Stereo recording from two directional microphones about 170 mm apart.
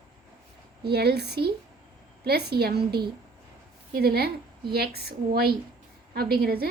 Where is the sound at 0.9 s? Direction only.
70° right (ahead or behind).